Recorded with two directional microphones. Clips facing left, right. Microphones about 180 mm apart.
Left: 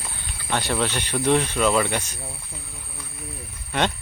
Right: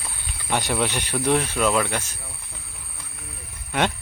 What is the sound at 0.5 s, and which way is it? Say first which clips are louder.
Speech: even; 10° right (ahead or behind).